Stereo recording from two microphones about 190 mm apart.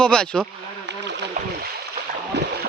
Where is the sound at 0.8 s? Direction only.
65° right (ahead or behind).